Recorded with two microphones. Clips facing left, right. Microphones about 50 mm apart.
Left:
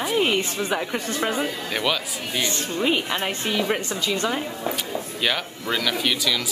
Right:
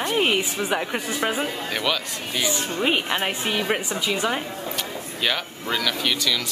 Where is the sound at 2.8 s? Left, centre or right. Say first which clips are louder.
Even; right.